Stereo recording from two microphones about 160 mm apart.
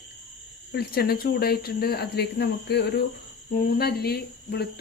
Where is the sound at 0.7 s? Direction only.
75° left (ahead or behind).